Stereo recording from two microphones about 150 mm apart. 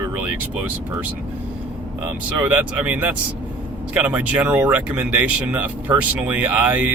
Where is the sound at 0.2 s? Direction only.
10° right (ahead or behind).